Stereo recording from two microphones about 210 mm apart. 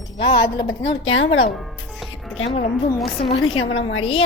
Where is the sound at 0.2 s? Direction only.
20° left (ahead or behind).